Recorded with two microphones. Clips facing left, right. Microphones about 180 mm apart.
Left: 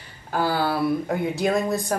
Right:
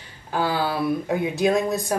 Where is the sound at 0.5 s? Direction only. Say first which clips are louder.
Left 1 dB; centre (ahead or behind).